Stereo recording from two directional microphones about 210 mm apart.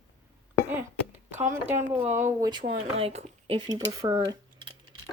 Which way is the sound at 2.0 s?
35° right (ahead or behind).